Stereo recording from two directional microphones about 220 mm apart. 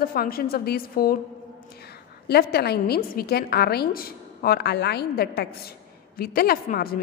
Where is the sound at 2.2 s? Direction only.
45° left (ahead or behind).